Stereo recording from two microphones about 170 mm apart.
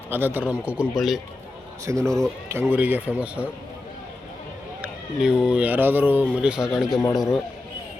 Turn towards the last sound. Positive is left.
turn(degrees=0)  # may be behind; listen again after turning